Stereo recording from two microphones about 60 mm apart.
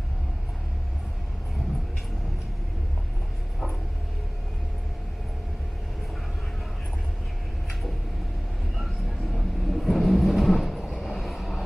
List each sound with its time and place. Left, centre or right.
8.7 s vehicle: centre